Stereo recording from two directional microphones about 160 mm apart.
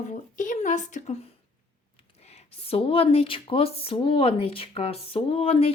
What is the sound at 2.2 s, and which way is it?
Speech, 40° left (ahead or behind).